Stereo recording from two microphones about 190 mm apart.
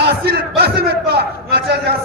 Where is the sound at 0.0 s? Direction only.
55° right (ahead or behind).